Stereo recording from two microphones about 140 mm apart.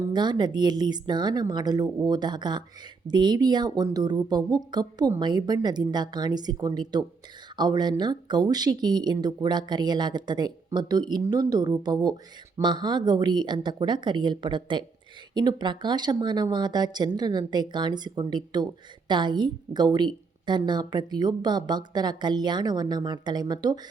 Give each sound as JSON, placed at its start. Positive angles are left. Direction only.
{"t": 0.1, "sound": "a woman's voice", "side_deg": -30}